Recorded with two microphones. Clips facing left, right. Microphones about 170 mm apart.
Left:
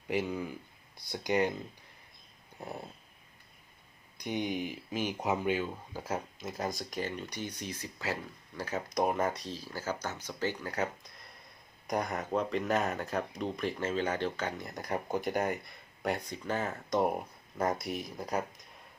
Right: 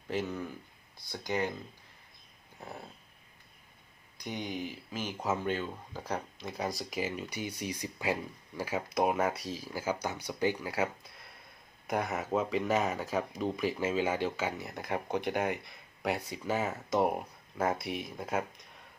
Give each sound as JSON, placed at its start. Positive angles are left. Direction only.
{"t": 0.1, "sound": "speech", "side_deg": 10}
{"t": 2.6, "sound": "speech", "side_deg": 15}
{"t": 4.2, "sound": "speech", "side_deg": 15}